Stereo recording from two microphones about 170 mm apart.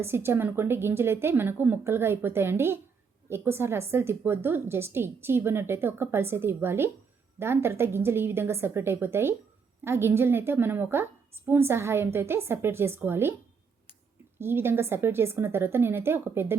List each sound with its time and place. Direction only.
0.0 s a woman's voice: 15° right (ahead or behind)
14.3 s a woman's voice: 15° right (ahead or behind)